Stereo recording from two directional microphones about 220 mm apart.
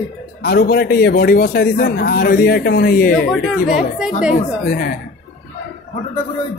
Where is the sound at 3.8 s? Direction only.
Centre (ahead or behind).